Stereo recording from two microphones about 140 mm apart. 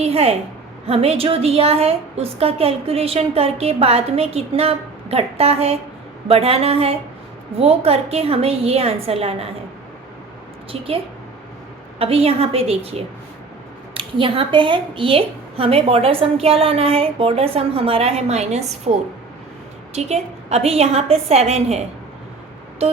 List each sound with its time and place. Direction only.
0.0 s a woman's voice: 45° right (ahead or behind)
10.7 s a woman's voice: 45° right (ahead or behind)
22.8 s a sound: 45° right (ahead or behind)